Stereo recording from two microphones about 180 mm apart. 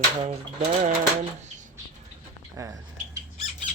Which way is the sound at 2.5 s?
15° right (ahead or behind).